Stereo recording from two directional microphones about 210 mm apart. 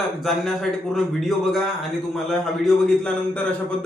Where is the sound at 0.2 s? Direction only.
Centre (ahead or behind).